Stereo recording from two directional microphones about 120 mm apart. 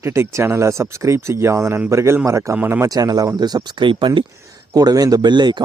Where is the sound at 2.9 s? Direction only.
30° right (ahead or behind).